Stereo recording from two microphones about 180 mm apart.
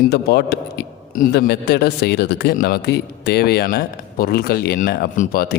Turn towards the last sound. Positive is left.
turn(degrees=55)  # may be behind; listen again after turning